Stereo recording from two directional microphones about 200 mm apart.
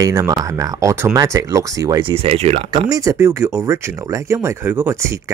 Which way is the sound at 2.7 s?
20° right (ahead or behind).